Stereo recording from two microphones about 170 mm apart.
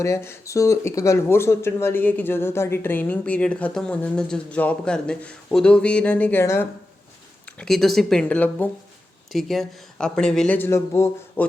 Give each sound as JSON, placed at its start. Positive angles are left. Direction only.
{"t": 0.0, "sound": "speech", "side_deg": 15}
{"t": 7.4, "sound": "speech", "side_deg": 5}